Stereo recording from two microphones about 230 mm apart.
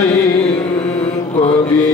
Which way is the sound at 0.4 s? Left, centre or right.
Left.